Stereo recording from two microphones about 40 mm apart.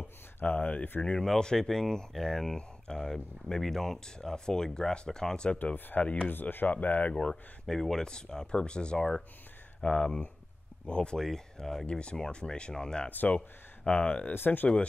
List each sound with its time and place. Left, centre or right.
0.0 s a sound: left
1.4 s speech: centre
5.9 s speech: left
6.7 s speech: left
7.6 s speech: centre; by 11.1 s left
11.1 s speech: centre
11.8 s speech: left
13.1 s speech: left
13.8 s speech: left
14.3 s speech: left